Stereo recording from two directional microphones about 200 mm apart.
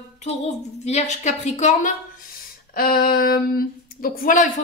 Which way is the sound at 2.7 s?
45° left (ahead or behind).